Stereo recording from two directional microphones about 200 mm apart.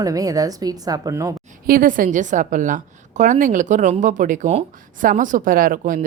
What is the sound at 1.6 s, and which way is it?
A woman's voice, 45° right (ahead or behind).